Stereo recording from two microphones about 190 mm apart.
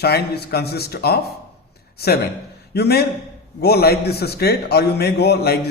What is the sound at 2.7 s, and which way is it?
A man's voice, 55° left (ahead or behind).